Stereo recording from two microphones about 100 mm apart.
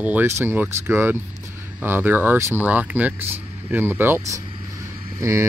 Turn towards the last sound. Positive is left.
turn(degrees=-30)  # may be behind; listen again after turning